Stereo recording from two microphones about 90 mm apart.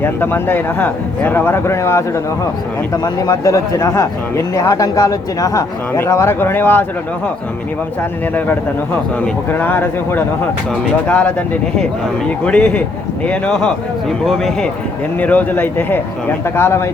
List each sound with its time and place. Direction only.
0.0 s a man's voice: 25° left (ahead or behind)
2.9 s speech: 45° left (ahead or behind); by 6.8 s 25° left (ahead or behind)
9.5 s a man's voice: 20° left (ahead or behind)
12.5 s speech: 10° left (ahead or behind)
15.2 s a man's voice: 20° left (ahead or behind)